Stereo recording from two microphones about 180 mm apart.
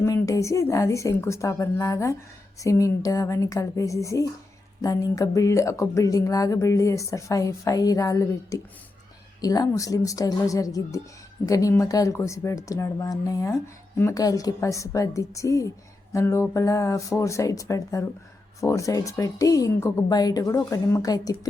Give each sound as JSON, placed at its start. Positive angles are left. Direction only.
{"t": 0.0, "sound": "speech", "side_deg": 20}